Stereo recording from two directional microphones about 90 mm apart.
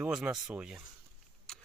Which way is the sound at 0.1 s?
5° right (ahead or behind).